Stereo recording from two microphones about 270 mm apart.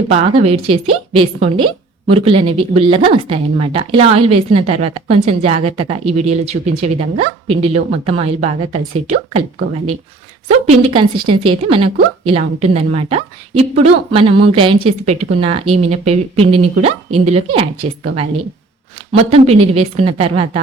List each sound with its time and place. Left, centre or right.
0.1 s a woman's voice: right
10.7 s a woman's voice: centre
19.2 s a woman's voice: right